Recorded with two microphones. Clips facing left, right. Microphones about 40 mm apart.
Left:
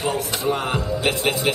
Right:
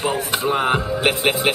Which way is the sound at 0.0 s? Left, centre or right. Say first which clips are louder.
Right 2 dB; right.